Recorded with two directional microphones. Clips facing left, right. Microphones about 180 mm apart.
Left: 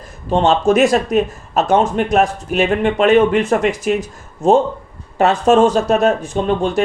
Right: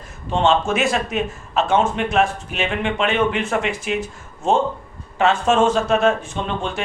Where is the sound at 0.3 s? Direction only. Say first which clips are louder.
Left 5 dB; 35° left (ahead or behind).